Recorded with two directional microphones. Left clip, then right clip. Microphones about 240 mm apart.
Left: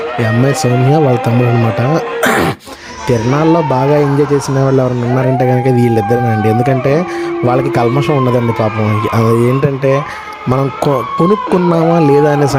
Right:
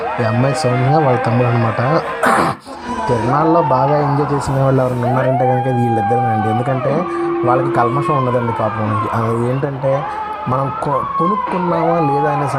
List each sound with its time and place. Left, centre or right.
1.0 s speech: left
2.2 s speech: left
7.4 s speech: left
11.7 s speech: left